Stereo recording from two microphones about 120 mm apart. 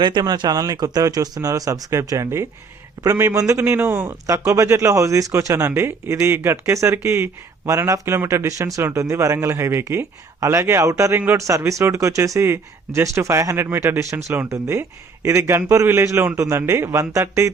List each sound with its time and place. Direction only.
0.0 s a man's voice: 35° right (ahead or behind)